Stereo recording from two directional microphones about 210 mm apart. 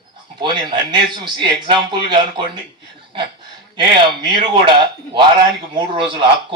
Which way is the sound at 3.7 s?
20° right (ahead or behind).